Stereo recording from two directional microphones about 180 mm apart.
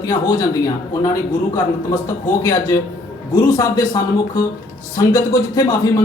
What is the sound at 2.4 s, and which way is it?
A man's voice, 20° left (ahead or behind).